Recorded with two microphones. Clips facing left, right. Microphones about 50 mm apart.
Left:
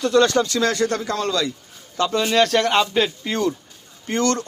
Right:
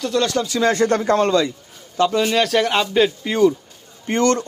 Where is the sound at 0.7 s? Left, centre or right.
Right.